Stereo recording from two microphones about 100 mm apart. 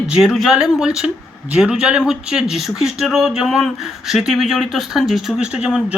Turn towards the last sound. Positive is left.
turn(degrees=-10)  # may be behind; listen again after turning